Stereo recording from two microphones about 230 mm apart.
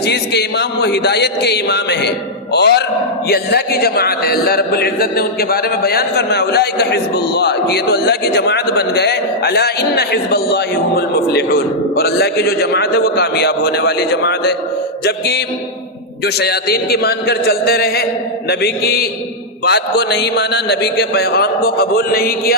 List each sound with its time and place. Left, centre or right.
0.0 s a man's voice: left